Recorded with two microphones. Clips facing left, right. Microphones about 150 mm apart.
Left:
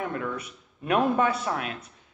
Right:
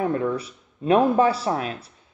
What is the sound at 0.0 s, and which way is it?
A man's voice, 30° right (ahead or behind).